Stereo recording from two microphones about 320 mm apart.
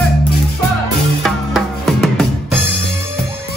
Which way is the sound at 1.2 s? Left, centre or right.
Centre.